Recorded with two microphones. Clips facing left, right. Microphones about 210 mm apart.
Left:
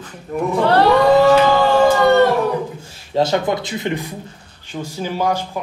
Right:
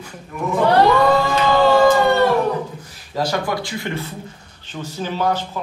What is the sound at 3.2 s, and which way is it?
Speech, 25° left (ahead or behind).